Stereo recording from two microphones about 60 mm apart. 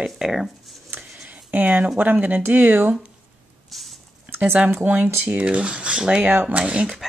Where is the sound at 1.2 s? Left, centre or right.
Right.